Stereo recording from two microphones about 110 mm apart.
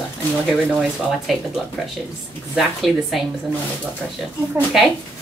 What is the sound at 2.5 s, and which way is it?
Speech, centre (ahead or behind).